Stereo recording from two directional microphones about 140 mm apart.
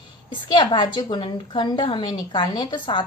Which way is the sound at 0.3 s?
35° left (ahead or behind).